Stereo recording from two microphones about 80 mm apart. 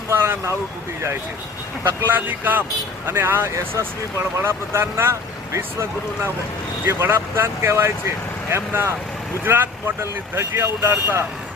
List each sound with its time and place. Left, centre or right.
0.1 s vehicle: right
1.8 s speech: right